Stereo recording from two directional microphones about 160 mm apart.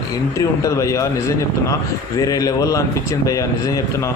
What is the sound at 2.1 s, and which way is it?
A man's voice, 20° left (ahead or behind).